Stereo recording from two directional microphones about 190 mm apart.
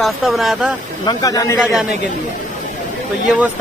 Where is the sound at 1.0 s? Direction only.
20° left (ahead or behind).